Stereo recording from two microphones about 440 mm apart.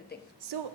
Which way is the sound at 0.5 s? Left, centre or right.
Right.